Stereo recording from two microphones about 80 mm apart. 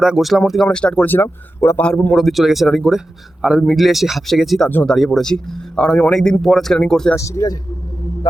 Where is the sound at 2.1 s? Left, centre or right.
Centre.